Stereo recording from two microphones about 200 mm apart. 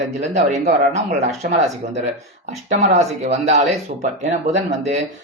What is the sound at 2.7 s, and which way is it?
Speech, 35° right (ahead or behind).